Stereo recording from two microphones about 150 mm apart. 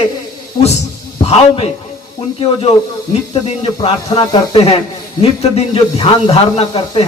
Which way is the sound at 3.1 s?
40° left (ahead or behind).